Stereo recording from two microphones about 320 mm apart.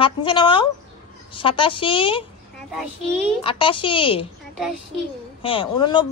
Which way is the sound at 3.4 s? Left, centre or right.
Centre.